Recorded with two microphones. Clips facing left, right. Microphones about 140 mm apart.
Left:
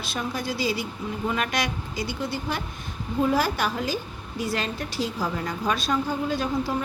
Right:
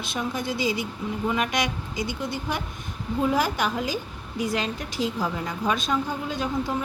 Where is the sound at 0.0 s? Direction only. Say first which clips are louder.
Right 1 dB; 20° right (ahead or behind).